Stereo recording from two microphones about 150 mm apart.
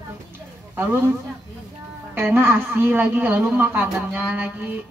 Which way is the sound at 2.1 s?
15° right (ahead or behind).